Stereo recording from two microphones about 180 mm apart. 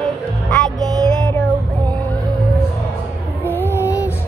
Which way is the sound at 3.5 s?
10° left (ahead or behind).